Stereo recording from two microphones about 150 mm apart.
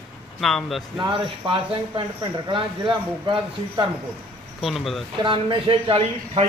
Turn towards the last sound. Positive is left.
turn(degrees=-35)  # may be behind; listen again after turning